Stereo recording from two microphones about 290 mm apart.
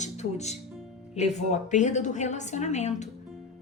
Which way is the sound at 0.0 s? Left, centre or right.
Left.